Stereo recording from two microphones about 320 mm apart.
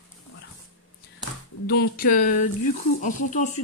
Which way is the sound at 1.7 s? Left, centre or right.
Left.